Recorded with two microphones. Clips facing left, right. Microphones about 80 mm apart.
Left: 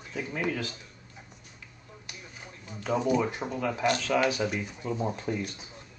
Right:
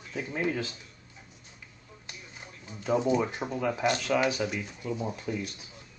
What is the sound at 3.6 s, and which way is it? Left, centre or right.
Speech, centre.